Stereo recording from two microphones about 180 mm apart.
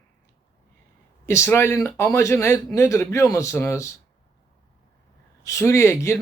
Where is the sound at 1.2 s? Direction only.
15° left (ahead or behind).